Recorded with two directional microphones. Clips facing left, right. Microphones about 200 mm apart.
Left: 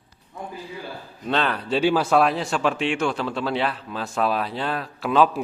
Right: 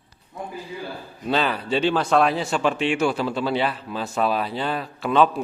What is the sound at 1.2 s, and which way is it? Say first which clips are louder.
Speech: right 1 dB; 5° right (ahead or behind).